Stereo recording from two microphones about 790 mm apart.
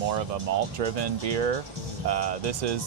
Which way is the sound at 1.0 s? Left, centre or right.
Right.